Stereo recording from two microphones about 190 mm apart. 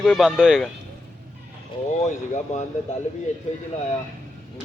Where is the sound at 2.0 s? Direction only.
35° left (ahead or behind).